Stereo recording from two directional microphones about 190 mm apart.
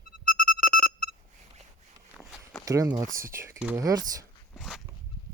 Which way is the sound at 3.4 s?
10° right (ahead or behind).